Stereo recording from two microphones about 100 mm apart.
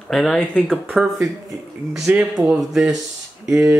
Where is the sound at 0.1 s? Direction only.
5° left (ahead or behind).